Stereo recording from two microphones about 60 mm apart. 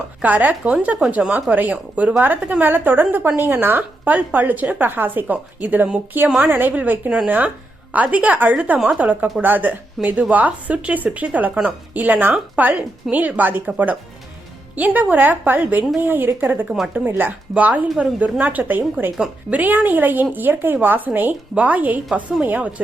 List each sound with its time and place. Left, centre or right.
0.2 s a woman's voice: right
14.8 s a woman's voice: right